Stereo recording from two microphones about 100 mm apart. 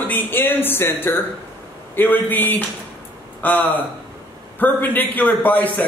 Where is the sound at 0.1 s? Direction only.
20° left (ahead or behind).